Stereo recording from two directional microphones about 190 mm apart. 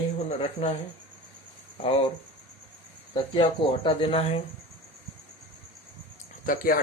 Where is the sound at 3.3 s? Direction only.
25° left (ahead or behind).